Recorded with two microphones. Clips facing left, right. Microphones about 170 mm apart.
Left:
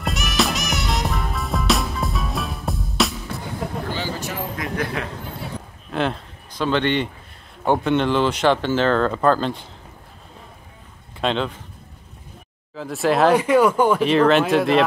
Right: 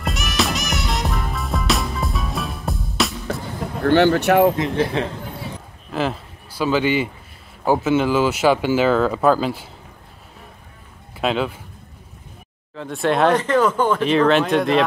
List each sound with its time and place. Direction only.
0.0 s music: centre (ahead or behind)
3.8 s speech: 65° right (ahead or behind)
4.6 s a man's voice: 30° right (ahead or behind)
5.9 s speech: centre (ahead or behind)
11.1 s speech: 5° right (ahead or behind)
12.7 s speech: centre (ahead or behind)